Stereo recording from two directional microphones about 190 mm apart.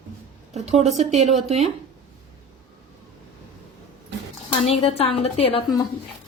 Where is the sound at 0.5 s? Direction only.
35° right (ahead or behind).